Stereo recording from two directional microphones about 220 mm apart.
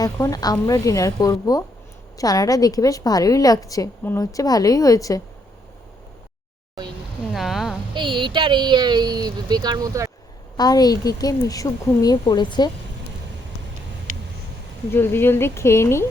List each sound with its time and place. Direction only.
0.0 s a woman's voice: 15° left (ahead or behind)
7.3 s a woman's voice: centre (ahead or behind)
7.9 s speech: 20° right (ahead or behind)
10.6 s a woman's voice: 15° left (ahead or behind)
14.1 s a sound: 40° right (ahead or behind)
14.8 s a woman's voice: 10° left (ahead or behind)